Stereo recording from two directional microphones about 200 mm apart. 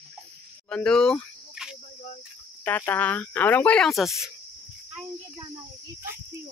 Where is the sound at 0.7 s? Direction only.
5° left (ahead or behind).